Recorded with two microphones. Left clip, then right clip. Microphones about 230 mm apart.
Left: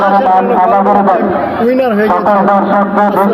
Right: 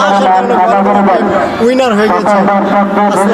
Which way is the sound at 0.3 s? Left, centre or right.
Right.